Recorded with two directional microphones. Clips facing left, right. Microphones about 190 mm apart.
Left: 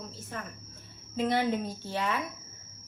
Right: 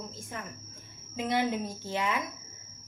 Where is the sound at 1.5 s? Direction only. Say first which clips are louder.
Left 1 dB; 10° right (ahead or behind).